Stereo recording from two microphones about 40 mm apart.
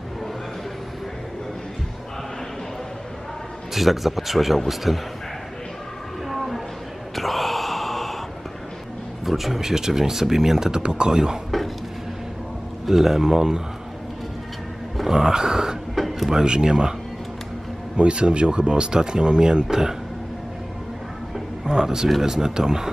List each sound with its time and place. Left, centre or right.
3.7 s a man's voice: centre
6.2 s a sound: centre
7.2 s gasp: centre
9.2 s speech: centre
12.8 s speech: centre
15.0 s speech: centre
15.9 s a sound: centre
16.3 s speech: centre
17.9 s speech: right
21.6 s speech: centre